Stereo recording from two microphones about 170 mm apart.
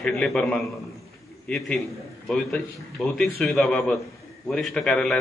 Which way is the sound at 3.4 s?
5° left (ahead or behind).